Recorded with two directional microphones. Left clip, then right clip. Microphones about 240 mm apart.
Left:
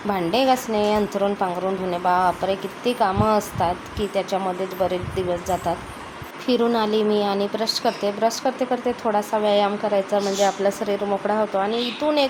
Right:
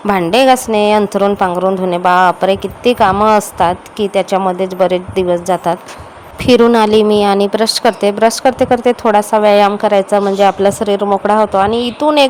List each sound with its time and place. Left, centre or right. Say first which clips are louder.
0.1 s a woman's voice: right 10 dB; right